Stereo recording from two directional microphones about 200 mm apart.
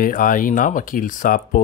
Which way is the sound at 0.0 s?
45° left (ahead or behind).